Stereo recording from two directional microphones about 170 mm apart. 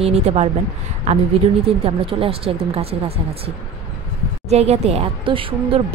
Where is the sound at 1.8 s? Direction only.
35° right (ahead or behind).